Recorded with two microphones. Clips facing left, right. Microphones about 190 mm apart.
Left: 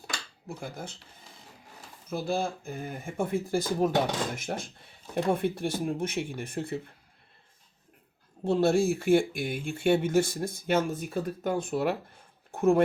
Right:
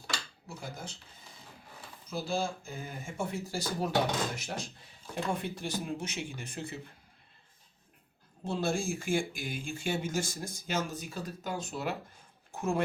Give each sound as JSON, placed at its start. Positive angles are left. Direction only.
{"t": 0.4, "sound": "speech", "side_deg": 55}
{"t": 2.0, "sound": "speech", "side_deg": 60}
{"t": 8.4, "sound": "speech", "side_deg": 60}